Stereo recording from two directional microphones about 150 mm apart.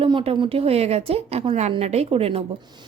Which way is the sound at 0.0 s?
35° right (ahead or behind).